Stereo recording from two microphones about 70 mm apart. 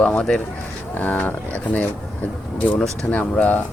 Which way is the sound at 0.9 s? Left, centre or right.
Left.